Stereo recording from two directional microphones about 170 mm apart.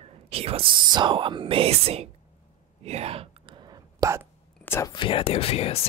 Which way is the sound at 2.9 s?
35° right (ahead or behind).